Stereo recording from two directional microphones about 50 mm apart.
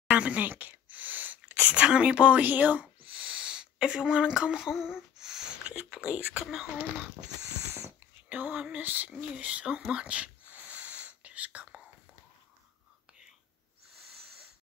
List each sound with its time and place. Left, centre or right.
0.1 s speech: right
0.5 s a sound: right
1.5 s speech: right
6.0 s speech: right
6.4 s speech: centre
8.3 s speech: right
9.2 s a sound: right